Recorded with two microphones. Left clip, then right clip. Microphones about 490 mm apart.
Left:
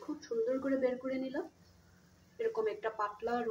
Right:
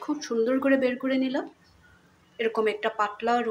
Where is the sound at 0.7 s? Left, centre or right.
Left.